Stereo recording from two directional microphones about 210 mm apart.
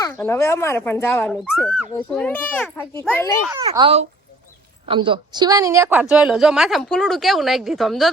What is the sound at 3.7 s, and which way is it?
A child's voice, 25° right (ahead or behind).